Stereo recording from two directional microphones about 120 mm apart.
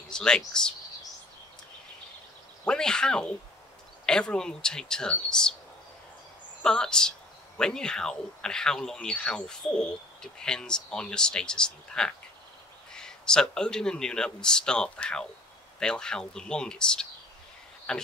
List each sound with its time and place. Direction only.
0.1 s speech: 5° left (ahead or behind)
2.6 s speech: 5° left (ahead or behind)
6.6 s speech: 5° left (ahead or behind)